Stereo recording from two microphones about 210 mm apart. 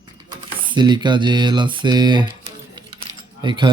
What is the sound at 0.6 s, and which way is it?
Speech, 20° right (ahead or behind).